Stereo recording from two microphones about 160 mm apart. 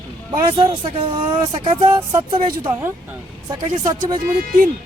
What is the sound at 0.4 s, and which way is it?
Speech, 30° right (ahead or behind).